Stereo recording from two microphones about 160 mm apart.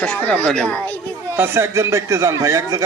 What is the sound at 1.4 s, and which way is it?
A man's voice, 15° right (ahead or behind).